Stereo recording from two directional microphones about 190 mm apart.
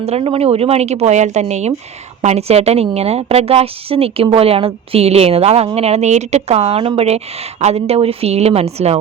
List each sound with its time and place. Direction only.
0.0 s a woman's voice: 30° right (ahead or behind)